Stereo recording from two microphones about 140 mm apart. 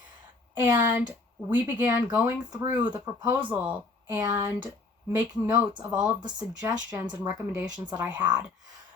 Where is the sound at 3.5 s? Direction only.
10° right (ahead or behind).